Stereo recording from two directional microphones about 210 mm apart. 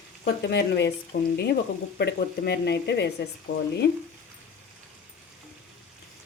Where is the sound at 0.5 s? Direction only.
50° left (ahead or behind).